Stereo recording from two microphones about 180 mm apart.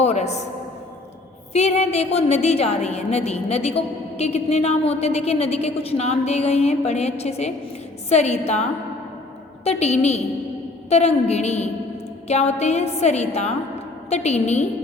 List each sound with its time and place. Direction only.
0.0 s a woman's voice: 40° left (ahead or behind)
1.5 s a woman's voice: 35° left (ahead or behind)
9.6 s a woman's voice: 35° left (ahead or behind)